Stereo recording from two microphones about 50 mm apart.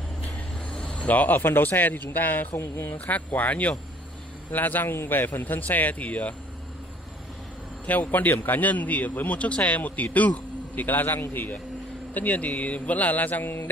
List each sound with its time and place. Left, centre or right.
0.7 s speech: left
2.5 s speech: left
2.9 s speech: left
7.8 s speech: left
11.1 s speech: left
11.3 s speech: left